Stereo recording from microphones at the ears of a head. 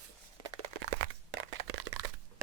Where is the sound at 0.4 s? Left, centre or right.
Right.